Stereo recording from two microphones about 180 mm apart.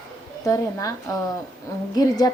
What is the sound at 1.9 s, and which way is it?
Speech, 20° left (ahead or behind).